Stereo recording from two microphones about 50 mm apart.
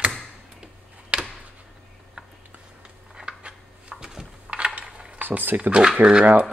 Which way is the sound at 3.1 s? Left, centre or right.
Centre.